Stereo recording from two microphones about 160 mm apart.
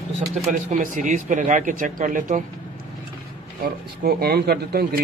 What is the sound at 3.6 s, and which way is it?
Speech, 75° right (ahead or behind).